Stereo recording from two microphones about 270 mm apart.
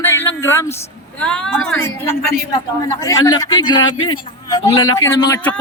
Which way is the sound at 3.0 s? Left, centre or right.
Centre.